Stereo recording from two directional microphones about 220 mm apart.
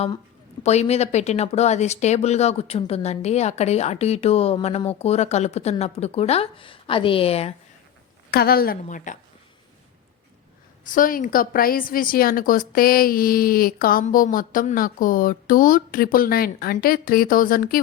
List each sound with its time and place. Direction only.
0.6 s speech: 30° left (ahead or behind)
8.3 s a woman's voice: 45° left (ahead or behind)
10.8 s a woman's voice: 40° left (ahead or behind)